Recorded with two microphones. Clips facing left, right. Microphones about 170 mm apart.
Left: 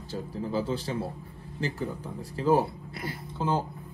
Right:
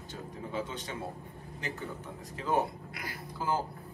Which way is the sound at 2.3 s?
35° left (ahead or behind).